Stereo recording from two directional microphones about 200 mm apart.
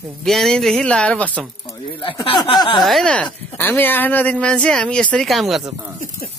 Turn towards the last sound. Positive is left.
turn(degrees=0)  # may be behind; listen again after turning